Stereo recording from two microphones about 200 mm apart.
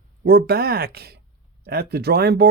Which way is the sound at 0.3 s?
50° right (ahead or behind).